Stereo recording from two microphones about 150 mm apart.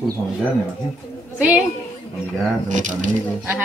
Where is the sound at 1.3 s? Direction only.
10° right (ahead or behind).